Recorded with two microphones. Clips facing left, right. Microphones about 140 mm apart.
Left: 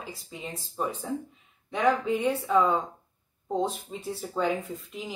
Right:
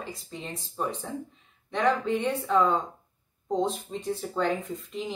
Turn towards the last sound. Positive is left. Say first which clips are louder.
# right 3 dB
turn(degrees=0)  # may be behind; listen again after turning